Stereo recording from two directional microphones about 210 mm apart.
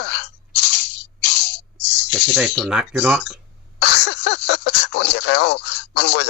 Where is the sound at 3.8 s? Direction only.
55° left (ahead or behind).